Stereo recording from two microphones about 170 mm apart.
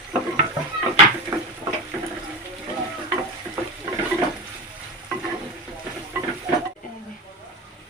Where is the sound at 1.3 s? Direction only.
25° right (ahead or behind).